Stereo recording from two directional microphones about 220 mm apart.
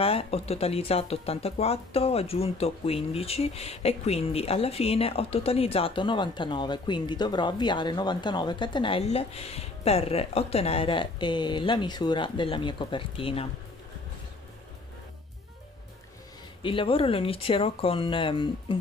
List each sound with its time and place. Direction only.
0.0 s speech: 25° left (ahead or behind)
16.6 s speech: 25° left (ahead or behind)